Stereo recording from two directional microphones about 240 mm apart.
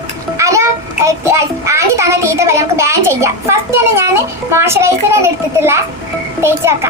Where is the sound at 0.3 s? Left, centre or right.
Centre.